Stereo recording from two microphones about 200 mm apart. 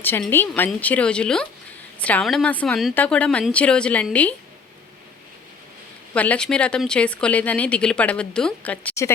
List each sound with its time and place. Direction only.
0.0 s a woman's voice: 10° left (ahead or behind)
6.1 s speech: 5° left (ahead or behind)